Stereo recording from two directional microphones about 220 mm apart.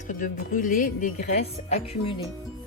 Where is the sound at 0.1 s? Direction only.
40° left (ahead or behind).